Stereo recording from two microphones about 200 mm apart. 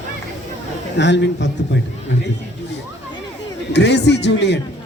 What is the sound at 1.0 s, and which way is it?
Speech, 60° left (ahead or behind).